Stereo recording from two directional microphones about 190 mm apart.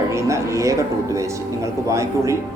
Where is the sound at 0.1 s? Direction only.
15° right (ahead or behind).